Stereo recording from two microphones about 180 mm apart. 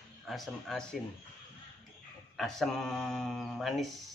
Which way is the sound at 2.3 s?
Centre (ahead or behind).